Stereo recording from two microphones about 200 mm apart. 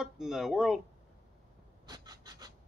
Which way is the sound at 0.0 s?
Centre (ahead or behind).